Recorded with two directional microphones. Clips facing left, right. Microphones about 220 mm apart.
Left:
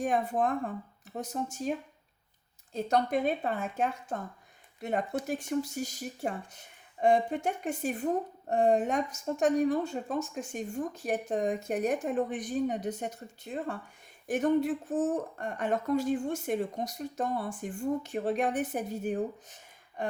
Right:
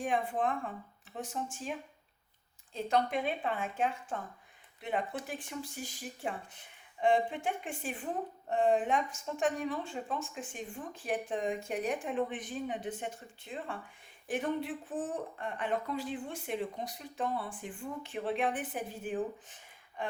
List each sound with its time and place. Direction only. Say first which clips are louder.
0.0 s a woman's voice: left 4 dB; 40° left (ahead or behind)
2.7 s a woman's voice: left 3 dB; 40° left (ahead or behind)
20.0 s a sound: left 4 dB; 40° left (ahead or behind)